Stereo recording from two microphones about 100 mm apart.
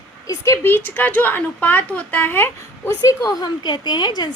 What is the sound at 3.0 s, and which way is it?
A woman's voice, 35° left (ahead or behind).